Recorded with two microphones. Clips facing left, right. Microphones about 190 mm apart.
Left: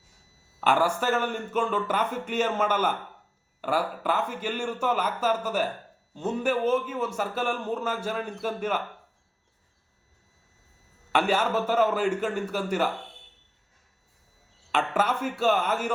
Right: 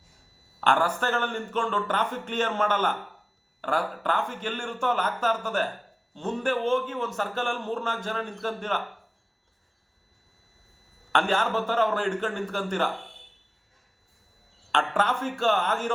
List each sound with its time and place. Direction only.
0.6 s a man's voice: 10° left (ahead or behind)
11.1 s a man's voice: 10° left (ahead or behind)
14.7 s a man's voice: 10° left (ahead or behind)